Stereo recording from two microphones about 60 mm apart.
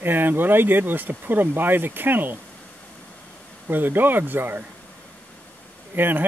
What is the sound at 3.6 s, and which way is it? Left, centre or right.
Speech, right.